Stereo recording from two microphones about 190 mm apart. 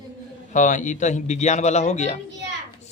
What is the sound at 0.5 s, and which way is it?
Speech, 40° left (ahead or behind).